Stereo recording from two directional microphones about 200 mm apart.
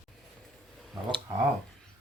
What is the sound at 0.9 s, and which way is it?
Speech, 15° right (ahead or behind).